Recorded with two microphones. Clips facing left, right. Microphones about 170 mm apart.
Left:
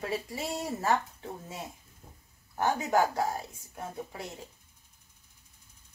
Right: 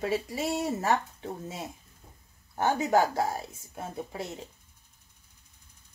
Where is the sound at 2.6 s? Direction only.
25° right (ahead or behind).